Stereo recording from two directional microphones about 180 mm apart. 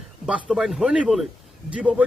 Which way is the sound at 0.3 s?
5° right (ahead or behind).